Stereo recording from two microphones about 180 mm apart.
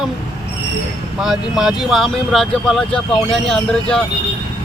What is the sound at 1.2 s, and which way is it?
Speech, centre (ahead or behind).